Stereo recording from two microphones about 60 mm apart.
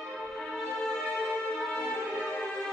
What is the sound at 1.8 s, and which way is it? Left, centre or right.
Music, centre.